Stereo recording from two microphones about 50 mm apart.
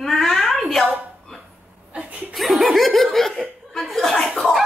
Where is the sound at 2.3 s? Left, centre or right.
Centre.